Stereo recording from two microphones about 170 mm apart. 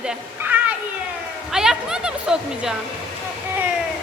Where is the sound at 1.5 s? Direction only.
5° right (ahead or behind).